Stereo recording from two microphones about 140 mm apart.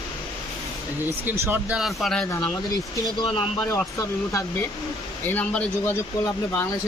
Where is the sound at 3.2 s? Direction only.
40° left (ahead or behind).